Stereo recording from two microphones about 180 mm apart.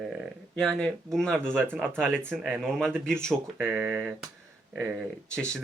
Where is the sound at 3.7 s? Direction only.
10° right (ahead or behind).